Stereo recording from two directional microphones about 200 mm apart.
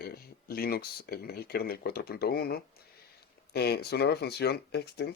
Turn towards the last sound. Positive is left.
turn(degrees=55)  # may be behind; listen again after turning